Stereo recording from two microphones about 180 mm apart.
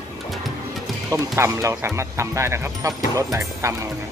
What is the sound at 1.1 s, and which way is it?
Speech, 15° right (ahead or behind).